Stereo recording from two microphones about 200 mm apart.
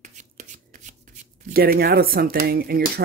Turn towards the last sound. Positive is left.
turn(degrees=-50)  # may be behind; listen again after turning